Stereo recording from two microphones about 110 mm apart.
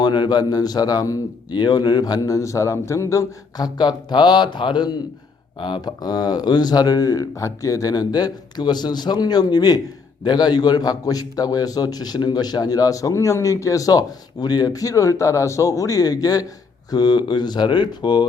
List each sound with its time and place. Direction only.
0.0 s a man's voice: 40° left (ahead or behind)